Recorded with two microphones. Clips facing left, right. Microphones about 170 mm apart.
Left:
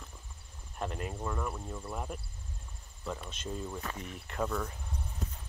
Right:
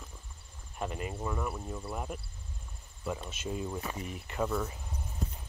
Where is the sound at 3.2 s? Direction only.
5° right (ahead or behind).